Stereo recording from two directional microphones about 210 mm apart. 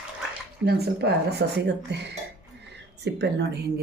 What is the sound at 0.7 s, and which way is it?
Speech, 50° right (ahead or behind).